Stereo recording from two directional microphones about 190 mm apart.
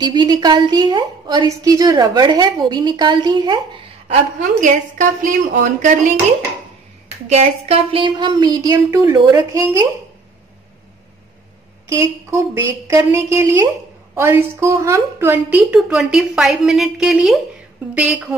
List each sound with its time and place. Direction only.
0.0 s a woman's voice: 20° right (ahead or behind)
4.1 s a woman's voice: 40° right (ahead or behind)
7.2 s a woman's voice: 35° right (ahead or behind); by 9.8 s 15° right (ahead or behind)
11.9 s a woman's voice: 15° right (ahead or behind)